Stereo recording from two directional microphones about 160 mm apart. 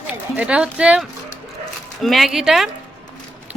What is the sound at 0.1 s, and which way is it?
A woman's voice, 10° right (ahead or behind).